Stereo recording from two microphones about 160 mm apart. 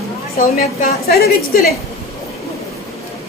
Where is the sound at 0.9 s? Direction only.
75° left (ahead or behind).